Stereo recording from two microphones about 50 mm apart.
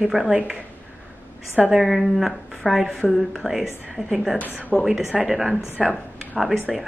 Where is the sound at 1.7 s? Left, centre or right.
Centre.